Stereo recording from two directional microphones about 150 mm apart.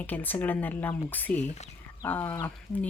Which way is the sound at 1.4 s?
50° left (ahead or behind).